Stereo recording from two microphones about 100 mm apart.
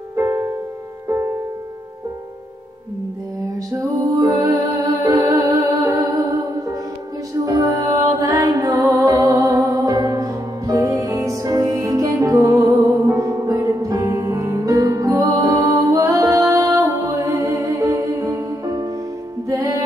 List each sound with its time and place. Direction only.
0.1 s music: 25° right (ahead or behind)
3.7 s music: 35° right (ahead or behind)
7.4 s music: 35° right (ahead or behind)